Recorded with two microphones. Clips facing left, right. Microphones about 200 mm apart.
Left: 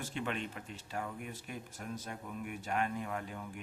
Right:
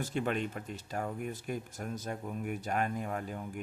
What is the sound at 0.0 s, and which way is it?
Speech, 45° right (ahead or behind).